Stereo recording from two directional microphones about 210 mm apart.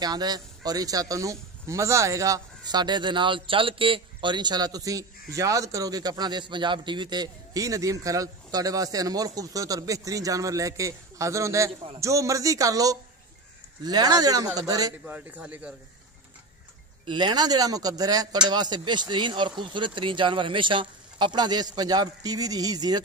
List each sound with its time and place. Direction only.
0.0 s speech: 20° right (ahead or behind)
17.0 s a man's voice: 20° right (ahead or behind)